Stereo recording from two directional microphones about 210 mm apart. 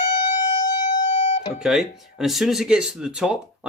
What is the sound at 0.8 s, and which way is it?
Guitar, 35° left (ahead or behind).